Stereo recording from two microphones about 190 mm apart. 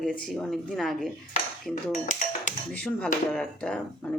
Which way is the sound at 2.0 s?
40° left (ahead or behind).